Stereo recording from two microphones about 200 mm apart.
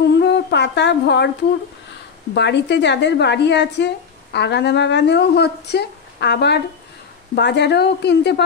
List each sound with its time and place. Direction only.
0.1 s humming: 60° left (ahead or behind)
2.3 s a woman's voice: 60° left (ahead or behind)